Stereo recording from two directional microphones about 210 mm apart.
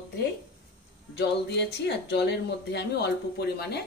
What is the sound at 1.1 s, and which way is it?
Speech, 50° left (ahead or behind).